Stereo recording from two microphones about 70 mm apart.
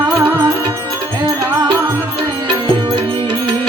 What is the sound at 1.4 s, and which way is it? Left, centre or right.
Music, right.